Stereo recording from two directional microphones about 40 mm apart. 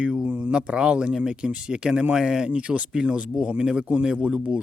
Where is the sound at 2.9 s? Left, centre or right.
Right.